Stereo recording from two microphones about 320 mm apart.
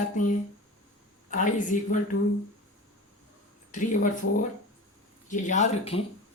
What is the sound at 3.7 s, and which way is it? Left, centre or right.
Speech, left.